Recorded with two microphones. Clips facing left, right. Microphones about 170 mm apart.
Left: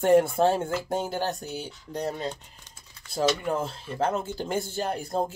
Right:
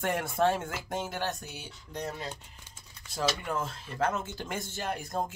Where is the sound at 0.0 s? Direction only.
30° left (ahead or behind).